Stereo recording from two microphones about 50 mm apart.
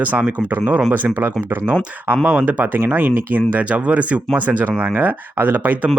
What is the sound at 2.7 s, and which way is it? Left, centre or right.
Speech, right.